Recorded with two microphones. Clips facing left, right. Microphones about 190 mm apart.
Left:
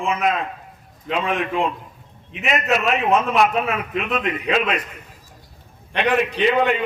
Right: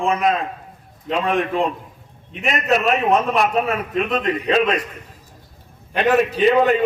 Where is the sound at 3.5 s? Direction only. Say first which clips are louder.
Right 3 dB; 40° right (ahead or behind).